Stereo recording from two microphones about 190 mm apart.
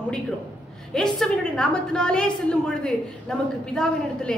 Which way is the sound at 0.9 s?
5° left (ahead or behind).